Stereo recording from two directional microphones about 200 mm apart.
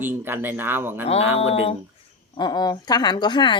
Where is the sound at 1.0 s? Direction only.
30° left (ahead or behind).